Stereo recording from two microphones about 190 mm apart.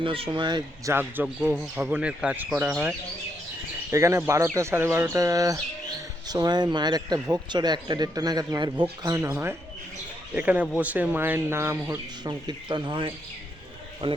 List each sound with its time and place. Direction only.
0.0 s speech: 30° right (ahead or behind)
0.9 s speech: 10° right (ahead or behind)
3.9 s speech: 15° right (ahead or behind)